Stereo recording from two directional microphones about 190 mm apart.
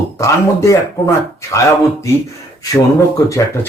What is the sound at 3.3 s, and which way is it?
Speech, 15° left (ahead or behind).